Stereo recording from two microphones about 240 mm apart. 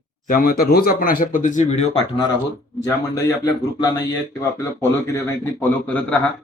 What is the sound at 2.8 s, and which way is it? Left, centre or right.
Speech, centre.